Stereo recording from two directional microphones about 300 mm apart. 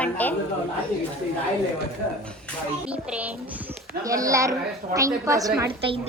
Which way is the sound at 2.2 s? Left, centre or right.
Centre.